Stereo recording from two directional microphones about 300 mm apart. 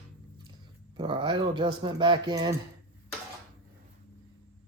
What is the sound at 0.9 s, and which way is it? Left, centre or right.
Speech, centre.